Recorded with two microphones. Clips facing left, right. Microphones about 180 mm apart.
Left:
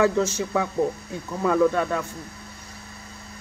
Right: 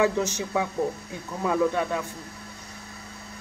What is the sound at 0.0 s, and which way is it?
Speech, 15° right (ahead or behind).